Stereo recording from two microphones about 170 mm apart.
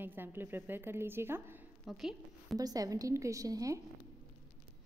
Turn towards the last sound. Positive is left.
turn(degrees=-20)  # may be behind; listen again after turning